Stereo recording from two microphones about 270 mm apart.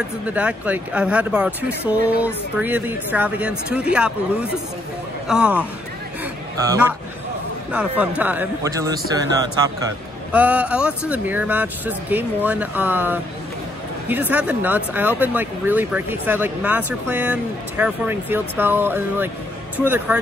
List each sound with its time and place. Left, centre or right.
0.3 s a woman's voice: centre
8.2 s a woman's voice: centre